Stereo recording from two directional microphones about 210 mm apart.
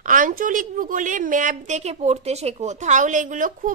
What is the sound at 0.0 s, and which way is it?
A woman's voice, 40° right (ahead or behind).